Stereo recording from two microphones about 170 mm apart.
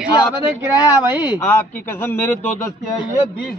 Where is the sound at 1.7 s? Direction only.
10° left (ahead or behind).